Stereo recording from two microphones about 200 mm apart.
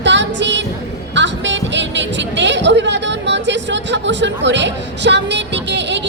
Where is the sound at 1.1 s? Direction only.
65° right (ahead or behind).